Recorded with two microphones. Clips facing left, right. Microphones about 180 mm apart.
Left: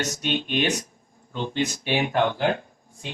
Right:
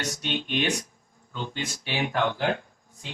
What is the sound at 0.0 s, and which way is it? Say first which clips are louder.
Speech: left 4 dB; 15° left (ahead or behind).